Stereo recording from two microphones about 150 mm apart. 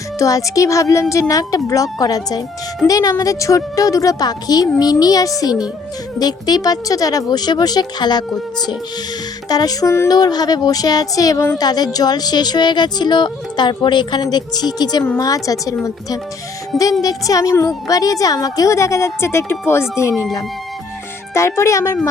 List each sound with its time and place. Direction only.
0.2 s speech: 20° left (ahead or behind)
9.5 s speech: 25° left (ahead or behind)
21.3 s speech: 20° left (ahead or behind)